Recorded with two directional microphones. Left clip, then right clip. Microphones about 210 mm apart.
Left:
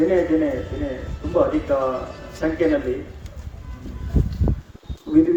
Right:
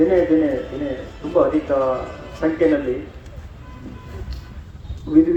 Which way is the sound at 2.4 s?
50° left (ahead or behind).